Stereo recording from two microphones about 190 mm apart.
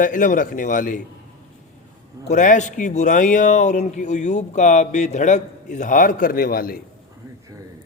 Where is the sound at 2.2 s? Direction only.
40° left (ahead or behind).